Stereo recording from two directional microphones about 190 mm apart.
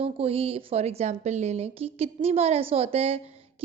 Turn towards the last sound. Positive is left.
turn(degrees=-30)  # may be behind; listen again after turning